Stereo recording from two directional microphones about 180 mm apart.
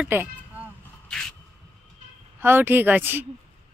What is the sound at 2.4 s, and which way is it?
Speech, 10° right (ahead or behind).